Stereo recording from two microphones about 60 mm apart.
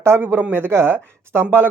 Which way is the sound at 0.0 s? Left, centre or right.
Right.